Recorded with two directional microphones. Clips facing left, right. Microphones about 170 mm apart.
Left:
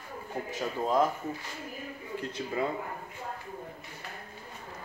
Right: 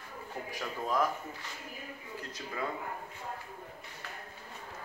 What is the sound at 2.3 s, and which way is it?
Speech, 25° left (ahead or behind).